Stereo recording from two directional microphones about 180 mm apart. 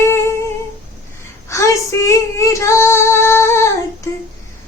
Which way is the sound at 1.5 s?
15° left (ahead or behind).